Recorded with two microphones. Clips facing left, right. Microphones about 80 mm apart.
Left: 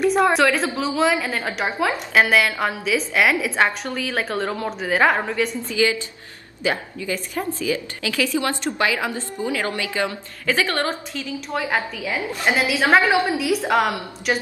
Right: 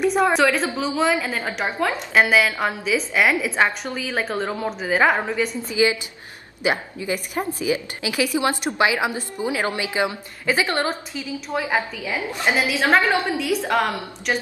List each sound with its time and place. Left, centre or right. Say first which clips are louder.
0.0 s a woman's voice: left 1 dB; centre
5.7 s a woman's voice: right 1 dB; centre